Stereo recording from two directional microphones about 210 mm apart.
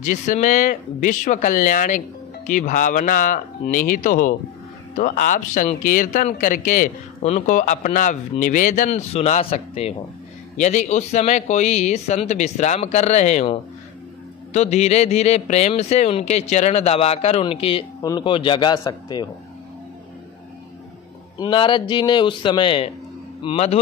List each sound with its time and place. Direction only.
0.0 s a man's voice: 35° left (ahead or behind); by 19.2 s 20° left (ahead or behind)
21.4 s a man's voice: 25° left (ahead or behind)